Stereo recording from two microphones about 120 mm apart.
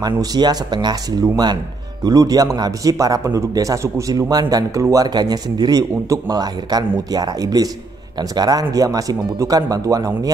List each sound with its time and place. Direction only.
0.0 s a man's voice: 35° right (ahead or behind)